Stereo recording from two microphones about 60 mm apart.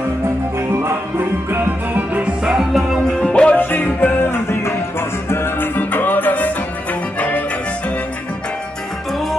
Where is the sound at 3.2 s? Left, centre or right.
Centre.